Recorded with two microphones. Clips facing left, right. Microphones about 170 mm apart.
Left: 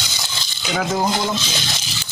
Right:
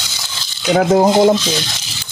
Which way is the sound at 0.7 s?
40° right (ahead or behind).